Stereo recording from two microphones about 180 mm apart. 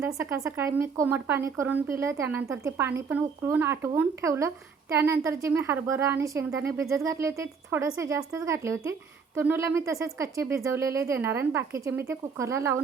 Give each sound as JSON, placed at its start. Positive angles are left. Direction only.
{"t": 0.0, "sound": "speech", "side_deg": -15}